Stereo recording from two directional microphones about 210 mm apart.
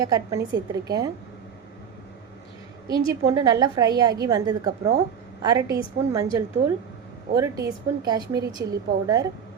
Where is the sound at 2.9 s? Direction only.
20° right (ahead or behind).